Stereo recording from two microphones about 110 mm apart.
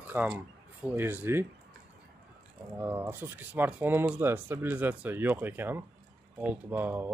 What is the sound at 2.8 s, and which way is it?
Speech, 25° right (ahead or behind).